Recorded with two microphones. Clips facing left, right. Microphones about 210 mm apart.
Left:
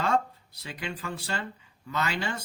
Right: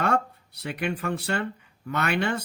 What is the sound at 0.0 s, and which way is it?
Speech, 65° right (ahead or behind).